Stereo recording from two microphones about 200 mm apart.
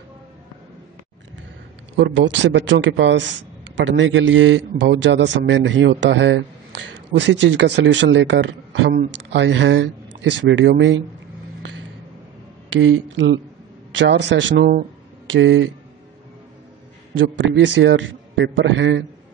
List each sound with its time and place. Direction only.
2.0 s speech: 65° right (ahead or behind)
12.6 s speech: 70° right (ahead or behind)
17.1 s speech: 70° right (ahead or behind)